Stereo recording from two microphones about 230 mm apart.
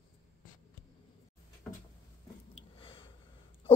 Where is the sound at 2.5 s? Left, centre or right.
Left.